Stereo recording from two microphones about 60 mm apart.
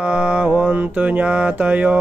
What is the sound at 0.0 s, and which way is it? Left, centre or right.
Mantra, centre.